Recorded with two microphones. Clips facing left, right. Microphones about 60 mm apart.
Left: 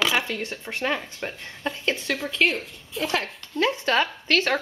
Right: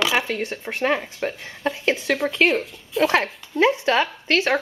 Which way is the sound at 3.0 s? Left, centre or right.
Right.